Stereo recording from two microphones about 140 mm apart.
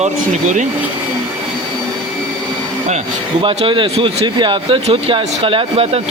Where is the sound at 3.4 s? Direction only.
40° right (ahead or behind).